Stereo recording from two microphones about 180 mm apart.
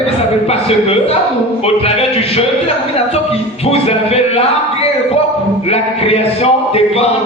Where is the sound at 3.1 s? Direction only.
35° left (ahead or behind).